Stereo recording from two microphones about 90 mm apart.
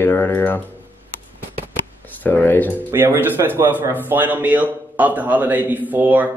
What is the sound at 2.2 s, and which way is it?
Speech, 20° left (ahead or behind).